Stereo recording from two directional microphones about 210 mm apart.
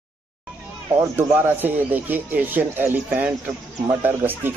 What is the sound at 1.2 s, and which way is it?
Speech, 10° right (ahead or behind).